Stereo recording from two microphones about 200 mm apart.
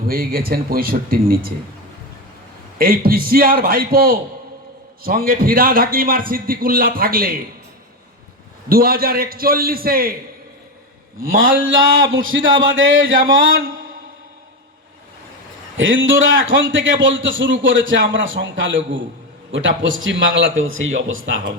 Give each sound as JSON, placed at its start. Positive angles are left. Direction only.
{"t": 0.0, "sound": "a man's voice", "side_deg": -45}
{"t": 2.7, "sound": "a man's voice", "side_deg": -45}
{"t": 8.7, "sound": "a man's voice", "side_deg": -45}
{"t": 11.3, "sound": "a man's voice", "side_deg": -70}
{"t": 15.8, "sound": "a man's voice", "side_deg": -75}